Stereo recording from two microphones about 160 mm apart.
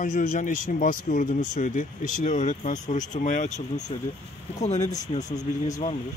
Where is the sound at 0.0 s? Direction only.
55° left (ahead or behind).